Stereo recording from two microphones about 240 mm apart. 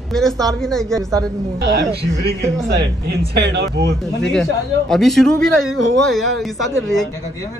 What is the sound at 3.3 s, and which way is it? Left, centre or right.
Speech, right.